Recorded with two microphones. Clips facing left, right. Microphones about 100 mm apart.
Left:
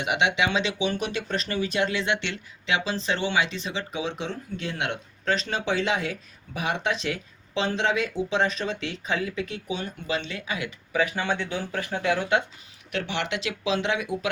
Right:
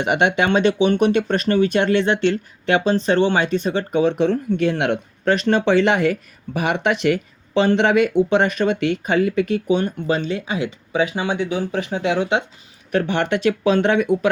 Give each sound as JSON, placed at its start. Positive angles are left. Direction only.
{"t": 0.0, "sound": "speech", "side_deg": -55}
{"t": 2.0, "sound": "speech", "side_deg": -45}
{"t": 10.3, "sound": "speech", "side_deg": -30}
{"t": 12.9, "sound": "speech", "side_deg": -45}